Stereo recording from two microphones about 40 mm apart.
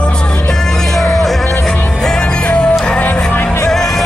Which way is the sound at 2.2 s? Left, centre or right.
Left.